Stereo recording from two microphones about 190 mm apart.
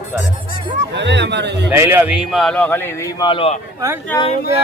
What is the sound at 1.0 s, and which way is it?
Speech, 65° right (ahead or behind).